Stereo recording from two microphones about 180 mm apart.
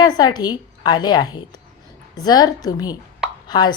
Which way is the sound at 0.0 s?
25° left (ahead or behind).